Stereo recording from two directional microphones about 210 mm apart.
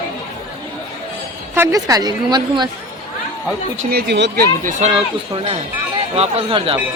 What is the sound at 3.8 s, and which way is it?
Speech, 45° right (ahead or behind).